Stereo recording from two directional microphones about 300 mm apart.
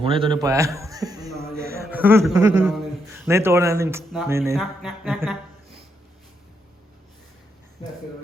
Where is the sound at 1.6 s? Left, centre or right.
Right.